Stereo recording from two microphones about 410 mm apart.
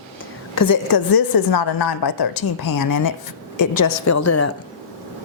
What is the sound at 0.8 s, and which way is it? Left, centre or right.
Speech, left.